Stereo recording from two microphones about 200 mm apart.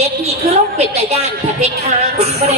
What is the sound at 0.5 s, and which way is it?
Speech, 35° right (ahead or behind).